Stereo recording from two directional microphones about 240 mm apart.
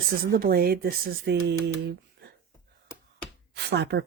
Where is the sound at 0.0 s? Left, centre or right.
Right.